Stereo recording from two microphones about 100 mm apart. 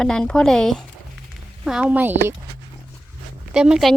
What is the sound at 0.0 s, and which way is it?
Speech, 5° left (ahead or behind).